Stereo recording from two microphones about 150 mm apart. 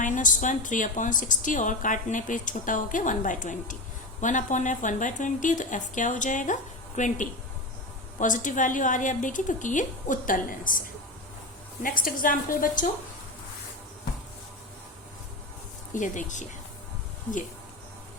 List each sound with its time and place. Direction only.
0.0 s a woman's voice: 60° left (ahead or behind)
16.0 s a woman's voice: 55° left (ahead or behind)